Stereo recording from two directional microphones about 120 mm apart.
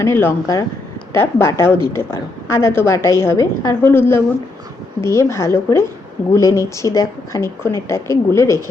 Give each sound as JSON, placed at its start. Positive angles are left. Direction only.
{"t": 0.0, "sound": "a woman's voice", "side_deg": 15}